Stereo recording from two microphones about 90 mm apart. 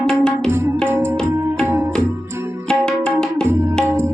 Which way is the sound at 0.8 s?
30° right (ahead or behind).